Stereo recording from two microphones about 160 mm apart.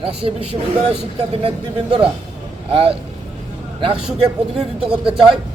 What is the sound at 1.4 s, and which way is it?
Speech, 35° right (ahead or behind).